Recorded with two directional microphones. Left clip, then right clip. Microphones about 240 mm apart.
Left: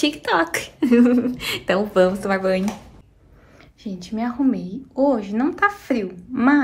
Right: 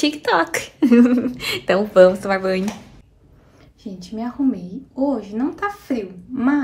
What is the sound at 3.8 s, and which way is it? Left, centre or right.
Speech, centre.